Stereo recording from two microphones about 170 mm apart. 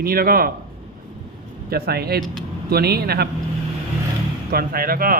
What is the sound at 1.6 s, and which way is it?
Speech, 65° right (ahead or behind).